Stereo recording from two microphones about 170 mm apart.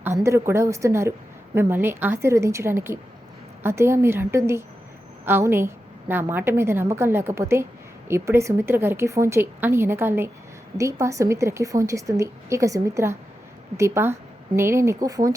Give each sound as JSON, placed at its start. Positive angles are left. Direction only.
{"t": 0.0, "sound": "a woman's voice", "side_deg": -15}